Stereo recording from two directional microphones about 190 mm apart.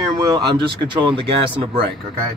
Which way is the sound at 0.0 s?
20° right (ahead or behind).